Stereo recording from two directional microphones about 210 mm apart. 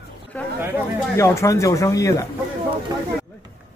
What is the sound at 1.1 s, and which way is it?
Speech, 15° left (ahead or behind).